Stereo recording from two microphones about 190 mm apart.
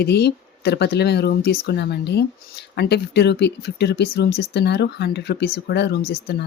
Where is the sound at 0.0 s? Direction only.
60° left (ahead or behind).